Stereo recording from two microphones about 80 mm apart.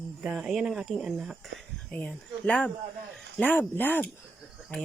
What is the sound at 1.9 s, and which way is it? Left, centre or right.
Speech, centre.